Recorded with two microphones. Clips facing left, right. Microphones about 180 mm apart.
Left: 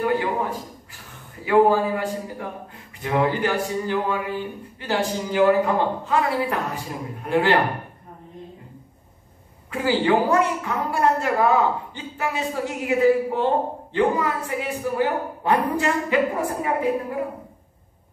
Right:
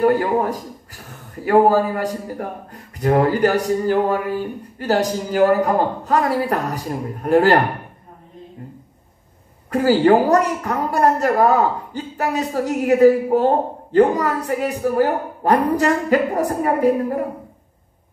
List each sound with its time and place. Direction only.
0.0 s a man's voice: 45° right (ahead or behind)
9.7 s a woman's voice: 40° right (ahead or behind)